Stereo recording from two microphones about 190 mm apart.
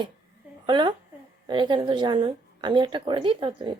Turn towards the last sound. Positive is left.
turn(degrees=-25)  # may be behind; listen again after turning